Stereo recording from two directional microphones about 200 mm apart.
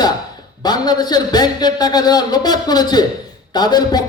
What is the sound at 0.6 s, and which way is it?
A man's voice, 20° left (ahead or behind).